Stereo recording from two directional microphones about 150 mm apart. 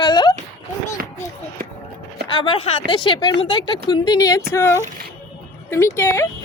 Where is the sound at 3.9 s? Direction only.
25° left (ahead or behind).